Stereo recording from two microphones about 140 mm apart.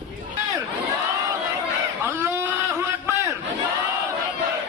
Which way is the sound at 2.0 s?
15° right (ahead or behind).